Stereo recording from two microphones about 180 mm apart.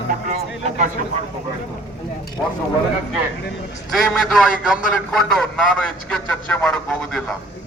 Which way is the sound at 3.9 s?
Centre (ahead or behind).